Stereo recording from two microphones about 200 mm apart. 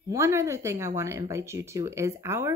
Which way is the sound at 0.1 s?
15° right (ahead or behind).